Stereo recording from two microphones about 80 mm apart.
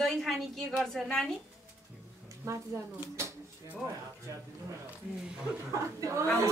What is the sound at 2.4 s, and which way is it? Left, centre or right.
Speech, right.